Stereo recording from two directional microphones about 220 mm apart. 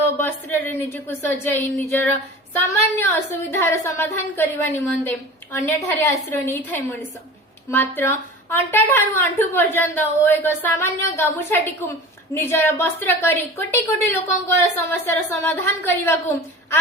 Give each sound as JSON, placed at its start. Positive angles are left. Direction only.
{"t": 0.2, "sound": "a woman's voice", "side_deg": 10}